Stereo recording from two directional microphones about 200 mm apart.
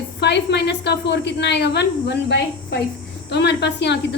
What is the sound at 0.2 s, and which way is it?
A woman's voice, 55° left (ahead or behind).